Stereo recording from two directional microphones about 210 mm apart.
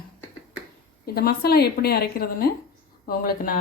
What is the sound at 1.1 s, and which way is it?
A woman's voice, 45° left (ahead or behind).